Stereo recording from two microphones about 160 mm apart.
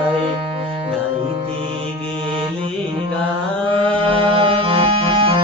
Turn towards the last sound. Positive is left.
turn(degrees=-30)  # may be behind; listen again after turning